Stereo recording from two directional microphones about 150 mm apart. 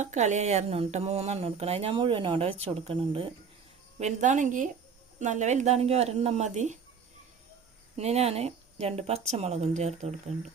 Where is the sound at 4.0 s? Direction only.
55° right (ahead or behind).